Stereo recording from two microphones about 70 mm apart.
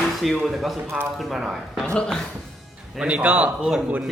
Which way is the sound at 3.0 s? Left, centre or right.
Centre.